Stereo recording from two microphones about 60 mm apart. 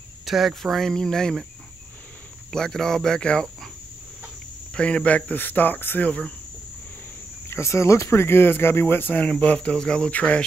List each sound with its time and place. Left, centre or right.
0.2 s speech: centre
2.5 s speech: centre
4.7 s speech: centre
6.0 s speech: left
7.4 s speech: left
9.2 s speech: centre